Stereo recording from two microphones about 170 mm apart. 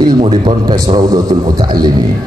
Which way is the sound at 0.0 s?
30° right (ahead or behind).